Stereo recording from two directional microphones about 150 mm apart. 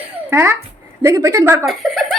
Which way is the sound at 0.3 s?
15° right (ahead or behind).